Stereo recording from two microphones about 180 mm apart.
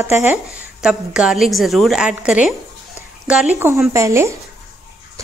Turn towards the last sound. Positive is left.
turn(degrees=-15)  # may be behind; listen again after turning